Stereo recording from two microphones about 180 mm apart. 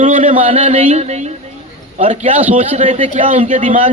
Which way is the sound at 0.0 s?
45° right (ahead or behind).